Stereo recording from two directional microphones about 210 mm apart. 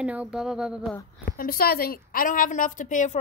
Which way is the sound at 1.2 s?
45° left (ahead or behind).